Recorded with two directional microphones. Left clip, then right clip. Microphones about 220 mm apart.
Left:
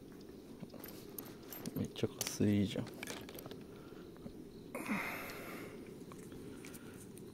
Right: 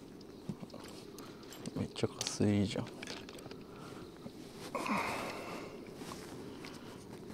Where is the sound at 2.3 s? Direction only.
10° left (ahead or behind).